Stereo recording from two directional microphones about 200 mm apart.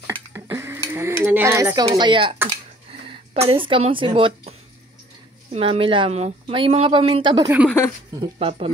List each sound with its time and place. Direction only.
0.0 s a woman's voice: 15° right (ahead or behind)